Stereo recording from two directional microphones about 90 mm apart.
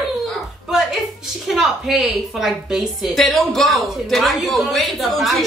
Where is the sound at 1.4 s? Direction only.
5° right (ahead or behind).